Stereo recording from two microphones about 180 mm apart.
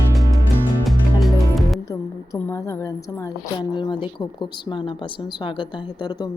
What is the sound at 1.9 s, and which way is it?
A woman's voice, 15° left (ahead or behind).